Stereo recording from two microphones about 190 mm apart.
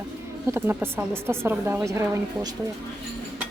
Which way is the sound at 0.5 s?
10° right (ahead or behind).